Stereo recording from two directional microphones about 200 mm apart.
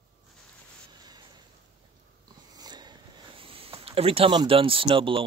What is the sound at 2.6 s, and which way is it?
Speech, 20° right (ahead or behind).